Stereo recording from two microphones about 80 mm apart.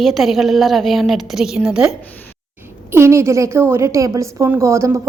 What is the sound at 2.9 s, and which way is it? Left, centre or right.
A woman's voice, right.